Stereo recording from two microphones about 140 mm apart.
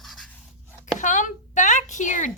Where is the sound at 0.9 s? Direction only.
65° left (ahead or behind).